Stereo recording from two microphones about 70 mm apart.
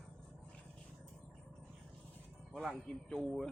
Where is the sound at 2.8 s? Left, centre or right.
Centre.